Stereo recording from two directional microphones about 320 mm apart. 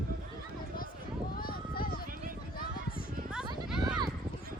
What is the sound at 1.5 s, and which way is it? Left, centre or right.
Run, left.